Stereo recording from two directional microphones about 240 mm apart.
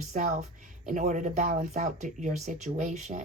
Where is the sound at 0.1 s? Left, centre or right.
Right.